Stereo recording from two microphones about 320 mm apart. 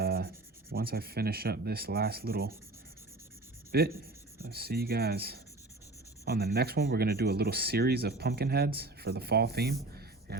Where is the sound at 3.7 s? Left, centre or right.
Right.